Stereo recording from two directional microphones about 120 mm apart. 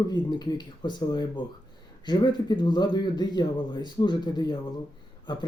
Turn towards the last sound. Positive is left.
turn(degrees=40)  # may be behind; listen again after turning